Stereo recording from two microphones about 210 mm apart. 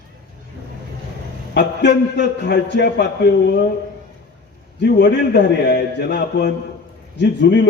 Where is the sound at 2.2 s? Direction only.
50° left (ahead or behind).